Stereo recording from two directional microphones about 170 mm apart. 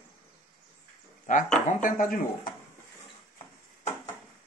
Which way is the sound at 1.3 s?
50° left (ahead or behind).